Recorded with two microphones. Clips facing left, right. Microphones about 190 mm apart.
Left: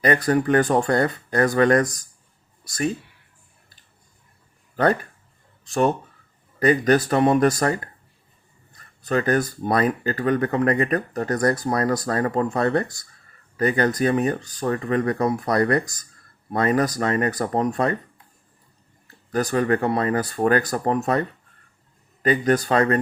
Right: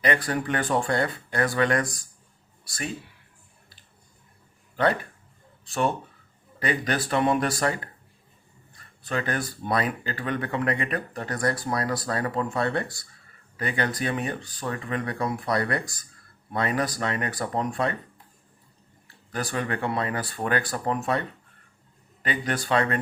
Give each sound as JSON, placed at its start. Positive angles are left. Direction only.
{"t": 0.0, "sound": "speech", "side_deg": 45}
{"t": 6.6, "sound": "speech", "side_deg": 45}
{"t": 19.0, "sound": "speech", "side_deg": 40}